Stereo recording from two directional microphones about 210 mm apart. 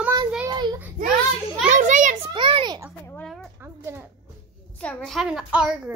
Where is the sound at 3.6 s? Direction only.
10° right (ahead or behind).